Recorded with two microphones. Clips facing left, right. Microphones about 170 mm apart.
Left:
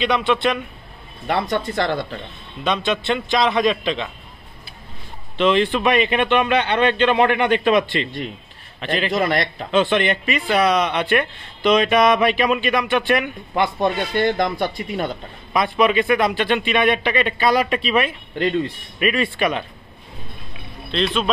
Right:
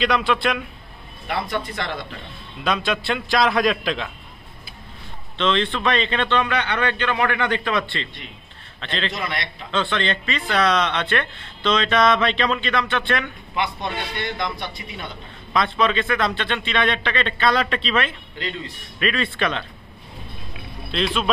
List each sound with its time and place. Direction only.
0.0 s a man's voice: centre (ahead or behind)
1.2 s speech: 35° left (ahead or behind)
2.6 s a man's voice: centre (ahead or behind)
5.4 s a man's voice: 10° left (ahead or behind)
9.1 s speech: 45° left (ahead or behind)
9.7 s speech: 15° left (ahead or behind)
13.6 s speech: 45° left (ahead or behind)
15.5 s speech: 15° left (ahead or behind)
20.9 s a man's voice: 5° right (ahead or behind)